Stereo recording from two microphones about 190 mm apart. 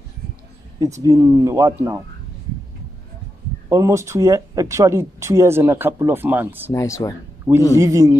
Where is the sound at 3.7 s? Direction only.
15° right (ahead or behind).